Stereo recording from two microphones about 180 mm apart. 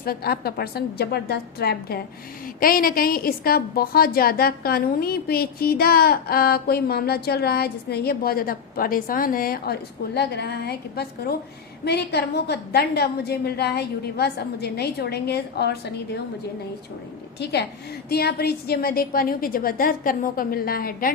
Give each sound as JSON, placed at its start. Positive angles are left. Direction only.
{"t": 0.0, "sound": "a woman's voice", "side_deg": 55}
{"t": 10.2, "sound": "a woman's voice", "side_deg": 65}
{"t": 17.4, "sound": "a woman's voice", "side_deg": 70}